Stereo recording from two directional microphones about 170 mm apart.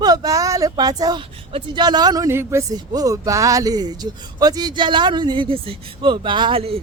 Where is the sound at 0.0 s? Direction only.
20° right (ahead or behind).